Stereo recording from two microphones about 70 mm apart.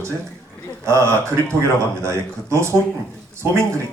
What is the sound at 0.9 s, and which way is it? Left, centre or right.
Speech, right.